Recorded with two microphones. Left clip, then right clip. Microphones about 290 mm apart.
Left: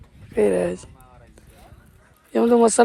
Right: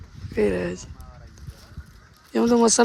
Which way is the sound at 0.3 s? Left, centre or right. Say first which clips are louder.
Left 4 dB; centre.